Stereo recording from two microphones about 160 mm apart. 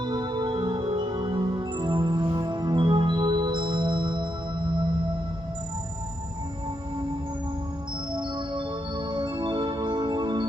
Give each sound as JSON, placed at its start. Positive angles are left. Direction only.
{"t": 0.0, "sound": "music", "side_deg": -30}
{"t": 8.1, "sound": "music", "side_deg": -30}